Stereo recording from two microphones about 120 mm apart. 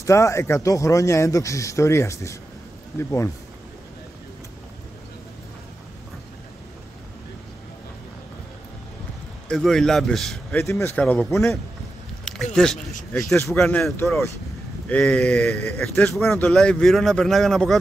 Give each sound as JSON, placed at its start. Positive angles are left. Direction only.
{"t": 0.0, "sound": "speech", "side_deg": 25}
{"t": 9.5, "sound": "speech", "side_deg": 5}
{"t": 10.6, "sound": "speech", "side_deg": 25}
{"t": 11.0, "sound": "speech", "side_deg": 10}
{"t": 14.9, "sound": "speech", "side_deg": 10}